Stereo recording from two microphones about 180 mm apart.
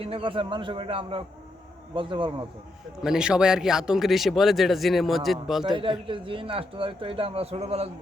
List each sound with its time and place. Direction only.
0.0 s a man's voice: 30° right (ahead or behind)
3.0 s a man's voice: 5° right (ahead or behind)
5.7 s speech: 25° right (ahead or behind)